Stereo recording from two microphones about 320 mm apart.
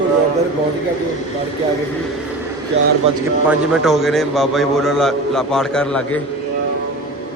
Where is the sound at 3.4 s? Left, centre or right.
Centre.